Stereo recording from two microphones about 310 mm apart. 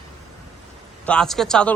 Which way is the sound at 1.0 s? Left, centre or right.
Centre.